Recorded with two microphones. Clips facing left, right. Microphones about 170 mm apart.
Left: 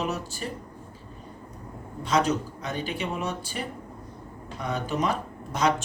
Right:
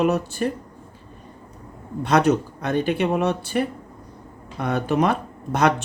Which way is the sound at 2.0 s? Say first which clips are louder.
Right 6 dB; 60° right (ahead or behind).